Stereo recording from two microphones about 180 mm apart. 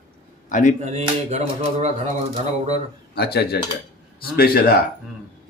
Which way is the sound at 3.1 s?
60° left (ahead or behind).